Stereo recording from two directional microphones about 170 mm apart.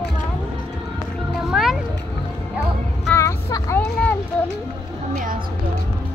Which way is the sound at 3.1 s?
15° left (ahead or behind).